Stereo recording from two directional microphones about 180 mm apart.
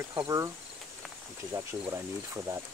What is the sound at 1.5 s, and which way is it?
Speech, 15° right (ahead or behind).